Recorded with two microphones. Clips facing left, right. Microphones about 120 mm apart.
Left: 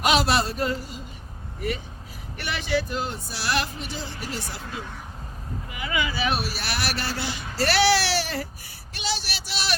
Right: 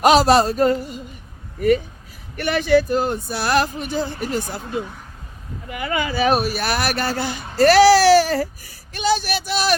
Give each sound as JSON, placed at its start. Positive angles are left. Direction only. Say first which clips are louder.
{"t": 0.0, "sound": "speech", "louder": "right 8 dB", "side_deg": -40}
{"t": 2.3, "sound": "speech", "louder": "right 10 dB", "side_deg": -50}